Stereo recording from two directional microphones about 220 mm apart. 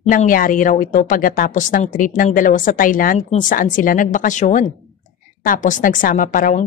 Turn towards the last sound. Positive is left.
turn(degrees=35)  # may be behind; listen again after turning